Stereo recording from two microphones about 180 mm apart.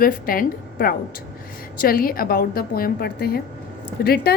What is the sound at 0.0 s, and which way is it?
A woman's voice, 50° left (ahead or behind).